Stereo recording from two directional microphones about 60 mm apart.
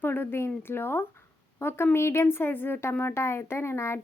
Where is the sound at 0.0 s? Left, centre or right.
Left.